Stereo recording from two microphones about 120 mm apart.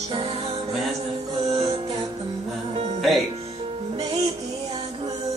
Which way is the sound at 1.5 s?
55° right (ahead or behind).